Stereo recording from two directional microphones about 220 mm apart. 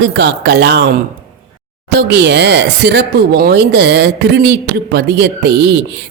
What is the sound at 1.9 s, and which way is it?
Speech, 50° right (ahead or behind).